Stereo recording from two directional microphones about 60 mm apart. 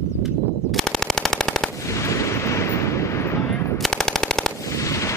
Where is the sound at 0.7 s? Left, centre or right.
Centre.